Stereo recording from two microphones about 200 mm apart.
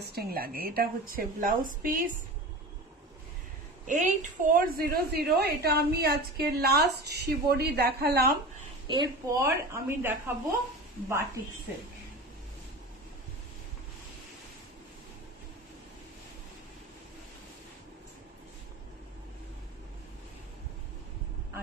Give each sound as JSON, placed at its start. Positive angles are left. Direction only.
{"t": 0.0, "sound": "a woman's voice", "side_deg": -50}
{"t": 3.8, "sound": "a woman's voice", "side_deg": -40}
{"t": 8.8, "sound": "a woman's voice", "side_deg": -20}